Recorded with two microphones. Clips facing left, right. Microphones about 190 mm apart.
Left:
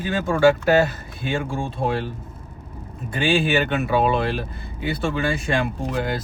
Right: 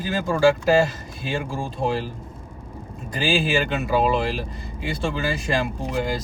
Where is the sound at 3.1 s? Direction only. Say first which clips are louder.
Left 2 dB; centre (ahead or behind).